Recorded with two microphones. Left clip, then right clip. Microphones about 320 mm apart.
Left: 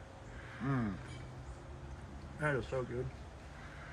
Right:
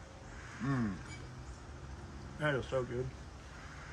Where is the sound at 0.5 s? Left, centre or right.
Centre.